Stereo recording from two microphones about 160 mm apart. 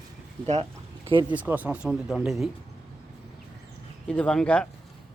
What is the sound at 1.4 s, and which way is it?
Speech, 10° right (ahead or behind).